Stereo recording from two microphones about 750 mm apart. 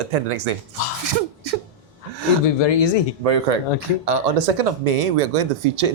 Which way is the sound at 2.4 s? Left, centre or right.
Left.